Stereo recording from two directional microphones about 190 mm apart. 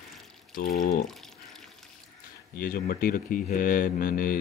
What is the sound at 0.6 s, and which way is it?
Speech, 45° left (ahead or behind).